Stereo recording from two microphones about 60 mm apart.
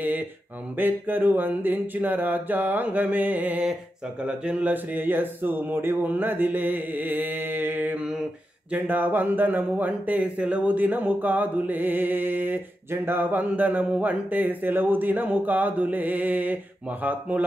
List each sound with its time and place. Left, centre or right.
0.7 s speech: right
4.2 s speech: centre
4.6 s speech: right